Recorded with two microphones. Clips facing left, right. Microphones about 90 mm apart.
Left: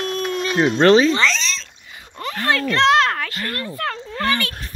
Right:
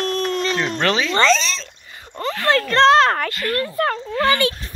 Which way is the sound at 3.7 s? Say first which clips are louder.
Right 5 dB; 10° right (ahead or behind).